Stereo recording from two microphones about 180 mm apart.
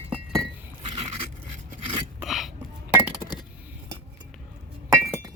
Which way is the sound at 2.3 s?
Centre (ahead or behind).